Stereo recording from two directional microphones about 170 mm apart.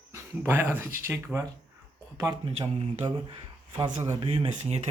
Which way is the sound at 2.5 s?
35° right (ahead or behind).